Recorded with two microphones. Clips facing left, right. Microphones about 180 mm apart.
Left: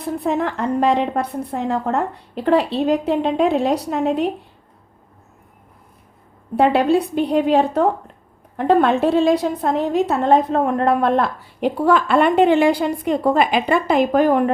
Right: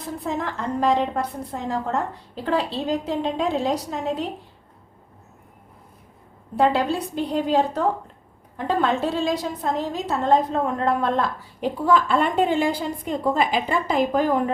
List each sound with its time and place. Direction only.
0.0 s a woman's voice: 60° left (ahead or behind)
6.6 s a woman's voice: 60° left (ahead or behind)